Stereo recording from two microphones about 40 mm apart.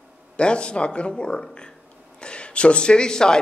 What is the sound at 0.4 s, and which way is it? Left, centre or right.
Speech, left.